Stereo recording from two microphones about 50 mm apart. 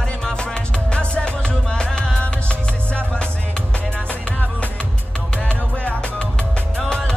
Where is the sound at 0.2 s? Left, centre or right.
Centre.